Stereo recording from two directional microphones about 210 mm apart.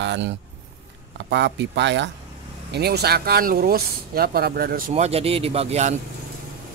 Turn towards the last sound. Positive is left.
turn(degrees=-30)  # may be behind; listen again after turning